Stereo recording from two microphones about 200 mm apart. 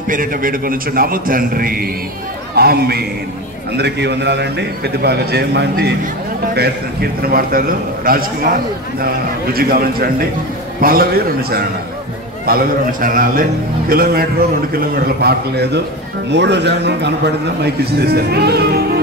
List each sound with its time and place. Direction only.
0.1 s a man's voice: 45° right (ahead or behind)
12.4 s a man's voice: 45° right (ahead or behind)